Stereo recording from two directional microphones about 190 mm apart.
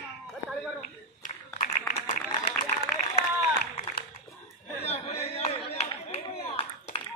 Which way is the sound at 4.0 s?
55° left (ahead or behind).